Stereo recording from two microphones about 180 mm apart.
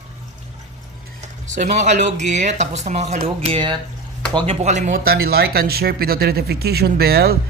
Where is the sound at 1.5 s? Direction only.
40° right (ahead or behind).